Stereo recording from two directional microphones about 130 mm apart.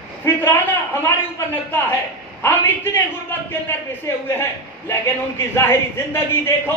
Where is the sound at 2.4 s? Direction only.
15° left (ahead or behind).